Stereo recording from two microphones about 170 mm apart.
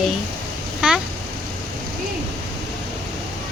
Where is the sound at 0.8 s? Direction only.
5° right (ahead or behind).